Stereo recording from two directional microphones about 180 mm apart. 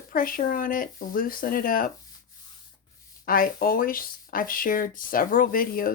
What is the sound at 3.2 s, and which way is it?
Speech, 50° left (ahead or behind).